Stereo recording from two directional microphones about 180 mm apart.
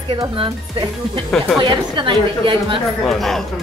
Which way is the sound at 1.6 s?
25° right (ahead or behind).